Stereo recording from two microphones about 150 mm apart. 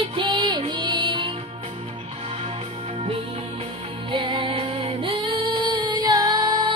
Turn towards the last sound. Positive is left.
turn(degrees=-30)  # may be behind; listen again after turning